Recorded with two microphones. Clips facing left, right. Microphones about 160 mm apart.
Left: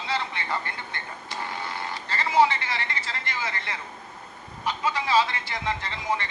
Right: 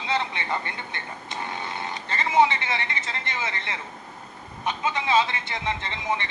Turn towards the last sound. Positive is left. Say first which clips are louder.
# even
turn(degrees=-20)  # may be behind; listen again after turning